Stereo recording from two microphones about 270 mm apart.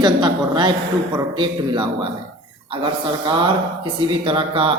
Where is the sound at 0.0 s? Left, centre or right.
Centre.